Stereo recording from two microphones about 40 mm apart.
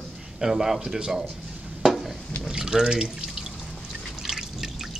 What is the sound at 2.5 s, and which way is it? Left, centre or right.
Speech, centre.